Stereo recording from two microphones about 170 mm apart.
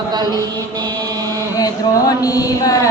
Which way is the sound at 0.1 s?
25° right (ahead or behind).